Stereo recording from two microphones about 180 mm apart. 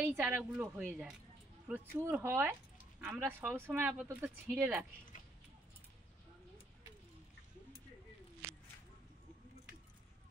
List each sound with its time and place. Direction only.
0.0 s speech: 10° right (ahead or behind)